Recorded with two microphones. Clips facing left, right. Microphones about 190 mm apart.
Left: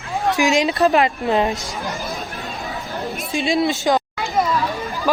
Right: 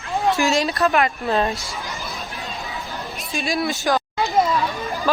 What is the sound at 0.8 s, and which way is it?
Speech, 30° left (ahead or behind).